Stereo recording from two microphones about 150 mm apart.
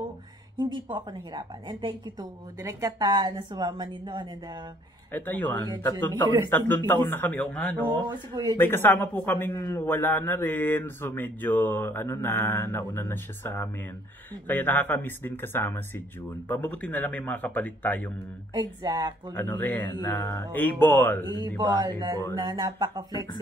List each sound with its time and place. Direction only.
0.6 s a woman's voice: 30° right (ahead or behind)
5.1 s a man's voice: 10° left (ahead or behind)
8.1 s a woman's voice: 25° right (ahead or behind)
8.5 s a man's voice: 15° left (ahead or behind)
18.5 s a woman's voice: 30° right (ahead or behind)
19.3 s a man's voice: 15° left (ahead or behind)
21.4 s a woman's voice: 30° right (ahead or behind)